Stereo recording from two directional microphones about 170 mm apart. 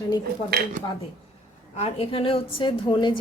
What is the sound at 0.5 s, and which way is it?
Speech, 65° right (ahead or behind).